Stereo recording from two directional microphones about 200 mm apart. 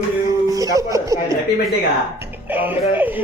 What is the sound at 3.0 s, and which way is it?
Speech, 10° right (ahead or behind).